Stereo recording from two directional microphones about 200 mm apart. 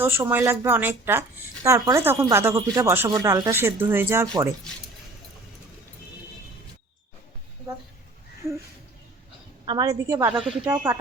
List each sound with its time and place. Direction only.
0.0 s speech: 10° right (ahead or behind)
9.6 s speech: 20° right (ahead or behind)
10.3 s speech: 5° right (ahead or behind)